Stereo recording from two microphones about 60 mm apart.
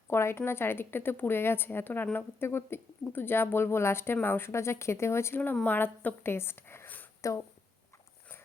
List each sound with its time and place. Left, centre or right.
0.1 s a woman's voice: left
5.6 s a woman's voice: left
6.8 s a sound: left